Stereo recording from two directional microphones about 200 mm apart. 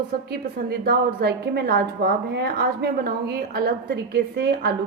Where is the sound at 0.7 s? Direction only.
55° right (ahead or behind).